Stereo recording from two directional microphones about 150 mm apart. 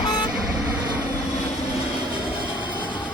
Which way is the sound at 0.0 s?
30° left (ahead or behind).